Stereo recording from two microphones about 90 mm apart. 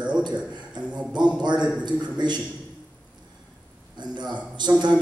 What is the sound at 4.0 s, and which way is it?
Speech, 55° right (ahead or behind).